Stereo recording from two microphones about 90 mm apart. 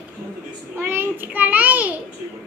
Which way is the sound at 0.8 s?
25° right (ahead or behind).